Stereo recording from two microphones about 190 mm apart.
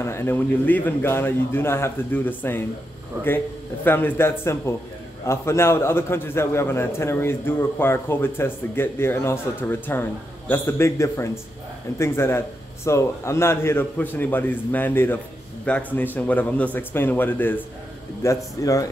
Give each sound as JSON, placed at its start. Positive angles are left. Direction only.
{"t": 0.0, "sound": "a man's voice", "side_deg": 15}
{"t": 3.8, "sound": "a man's voice", "side_deg": 10}